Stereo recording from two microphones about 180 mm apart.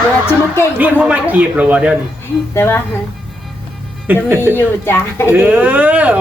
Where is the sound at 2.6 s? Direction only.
10° left (ahead or behind).